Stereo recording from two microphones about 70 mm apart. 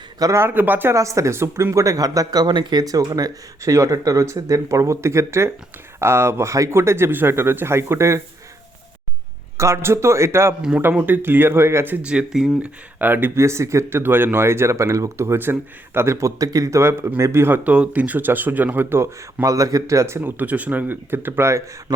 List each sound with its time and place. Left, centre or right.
0.3 s speech: right
0.9 s speech: right
9.6 s speech: right
10.9 s speech: right
12.0 s speech: centre
13.0 s speech: right
14.0 s speech: right
17.6 s speech: right
19.5 s speech: right
20.1 s speech: right